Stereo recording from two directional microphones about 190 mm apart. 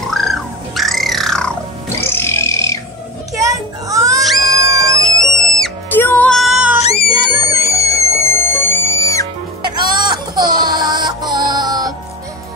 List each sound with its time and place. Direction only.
0.1 s squawk: centre (ahead or behind)
2.0 s wild animals: 15° left (ahead or behind)
3.3 s a sound: 15° right (ahead or behind)
4.4 s music: 15° right (ahead or behind)
5.2 s music: 5° left (ahead or behind)
6.8 s music: 35° left (ahead or behind)
7.6 s music: 15° left (ahead or behind)
9.6 s music: 20° right (ahead or behind)